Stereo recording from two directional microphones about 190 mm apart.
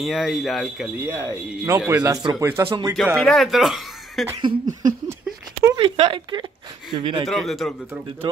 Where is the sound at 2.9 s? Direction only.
Centre (ahead or behind).